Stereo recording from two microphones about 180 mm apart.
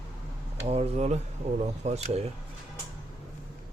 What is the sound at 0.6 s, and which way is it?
Speech, 35° right (ahead or behind).